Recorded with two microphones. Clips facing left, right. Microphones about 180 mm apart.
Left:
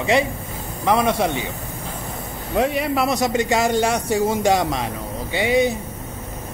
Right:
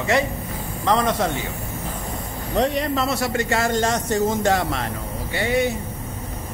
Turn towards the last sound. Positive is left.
turn(degrees=15)  # may be behind; listen again after turning